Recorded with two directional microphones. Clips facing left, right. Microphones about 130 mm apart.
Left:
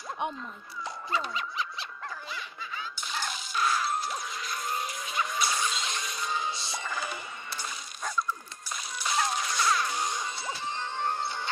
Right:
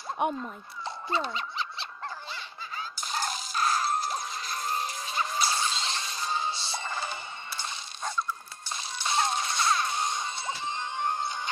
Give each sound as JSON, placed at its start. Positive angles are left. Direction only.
{"t": 0.3, "sound": "dog", "side_deg": -25}
{"t": 2.3, "sound": "a sound", "side_deg": -40}
{"t": 8.6, "sound": "music", "side_deg": -25}